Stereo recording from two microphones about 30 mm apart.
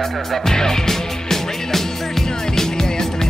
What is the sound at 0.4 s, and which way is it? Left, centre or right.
Music, centre.